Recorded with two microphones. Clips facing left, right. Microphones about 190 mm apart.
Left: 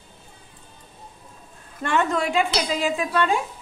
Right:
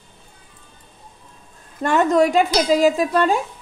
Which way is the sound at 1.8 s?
40° right (ahead or behind).